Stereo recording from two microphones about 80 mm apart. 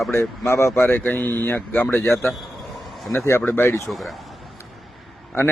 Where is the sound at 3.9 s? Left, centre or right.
Centre.